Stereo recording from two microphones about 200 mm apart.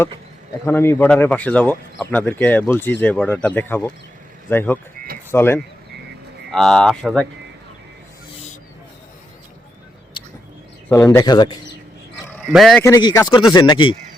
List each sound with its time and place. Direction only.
0.6 s speech: 10° left (ahead or behind)
10.8 s speech: 10° left (ahead or behind)
12.4 s speech: centre (ahead or behind)
12.8 s speech: 20° left (ahead or behind)